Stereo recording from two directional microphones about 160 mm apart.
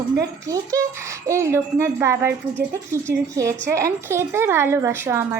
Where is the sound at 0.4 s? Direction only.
20° right (ahead or behind).